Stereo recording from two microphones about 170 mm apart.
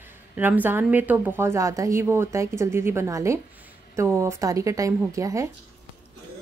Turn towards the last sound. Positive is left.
turn(degrees=-20)  # may be behind; listen again after turning